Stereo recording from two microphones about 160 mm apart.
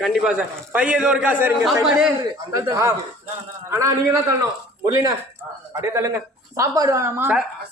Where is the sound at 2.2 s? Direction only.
20° right (ahead or behind).